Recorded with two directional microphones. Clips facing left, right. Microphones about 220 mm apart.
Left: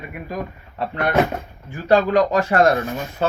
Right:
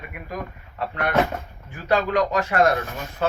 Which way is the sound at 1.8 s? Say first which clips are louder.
Left 5 dB; 30° left (ahead or behind).